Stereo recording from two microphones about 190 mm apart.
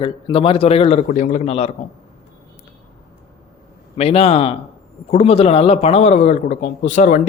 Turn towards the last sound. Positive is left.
turn(degrees=40)  # may be behind; listen again after turning